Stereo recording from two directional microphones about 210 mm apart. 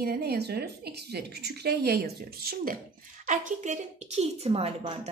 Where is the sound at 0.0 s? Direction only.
50° right (ahead or behind).